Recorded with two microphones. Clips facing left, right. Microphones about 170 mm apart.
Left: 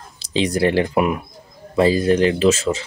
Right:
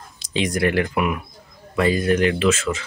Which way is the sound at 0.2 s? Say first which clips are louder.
Left 3 dB; 30° left (ahead or behind).